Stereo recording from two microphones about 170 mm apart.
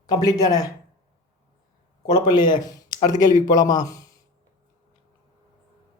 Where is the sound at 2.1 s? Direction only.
25° left (ahead or behind).